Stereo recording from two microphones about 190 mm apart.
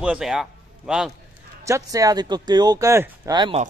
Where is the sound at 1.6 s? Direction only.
15° right (ahead or behind).